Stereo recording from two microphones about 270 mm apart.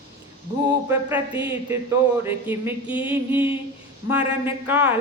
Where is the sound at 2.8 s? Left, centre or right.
Centre.